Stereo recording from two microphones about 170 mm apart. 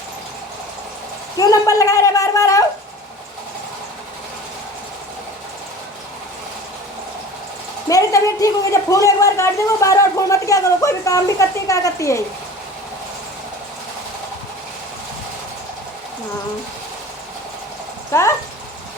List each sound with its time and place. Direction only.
1.4 s speech: 20° left (ahead or behind)
7.9 s speech: 20° left (ahead or behind)
18.1 s speech: 15° left (ahead or behind)